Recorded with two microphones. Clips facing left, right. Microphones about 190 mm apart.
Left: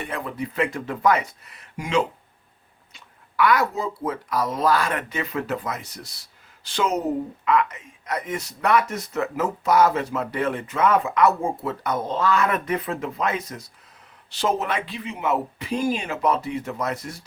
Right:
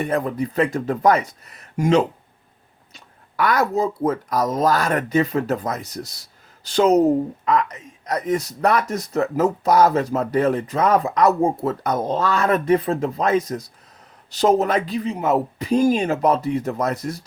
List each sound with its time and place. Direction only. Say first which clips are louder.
0.0 s speech: right 8 dB; 40° right (ahead or behind)